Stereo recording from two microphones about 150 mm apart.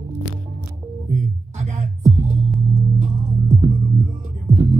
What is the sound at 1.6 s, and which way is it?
Music, 50° right (ahead or behind).